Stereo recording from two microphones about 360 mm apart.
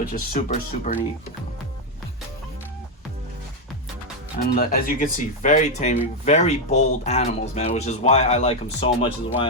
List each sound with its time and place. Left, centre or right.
0.0 s speech: left
4.4 s speech: left